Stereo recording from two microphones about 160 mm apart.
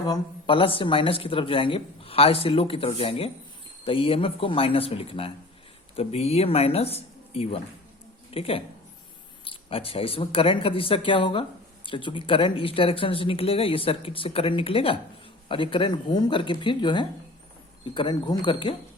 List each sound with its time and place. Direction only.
0.0 s a woman's voice: 30° left (ahead or behind)